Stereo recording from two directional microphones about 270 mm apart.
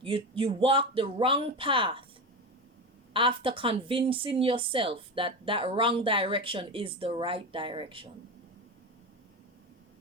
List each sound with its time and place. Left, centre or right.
0.0 s speech: centre
3.1 s speech: centre